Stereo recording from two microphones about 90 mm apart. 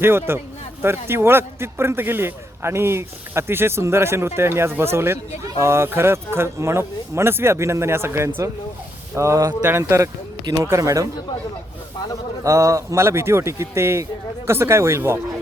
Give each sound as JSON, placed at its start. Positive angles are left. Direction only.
{"t": 0.0, "sound": "a man's voice", "side_deg": -25}
{"t": 12.5, "sound": "a man's voice", "side_deg": -35}